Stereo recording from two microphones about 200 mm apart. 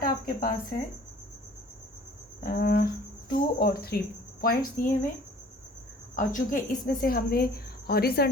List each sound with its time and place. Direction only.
0.0 s cricket: 45° left (ahead or behind)
2.4 s speech: 50° left (ahead or behind)
6.1 s speech: 40° left (ahead or behind)